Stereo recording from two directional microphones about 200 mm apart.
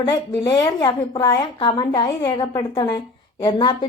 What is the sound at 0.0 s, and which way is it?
A woman's voice, 20° left (ahead or behind).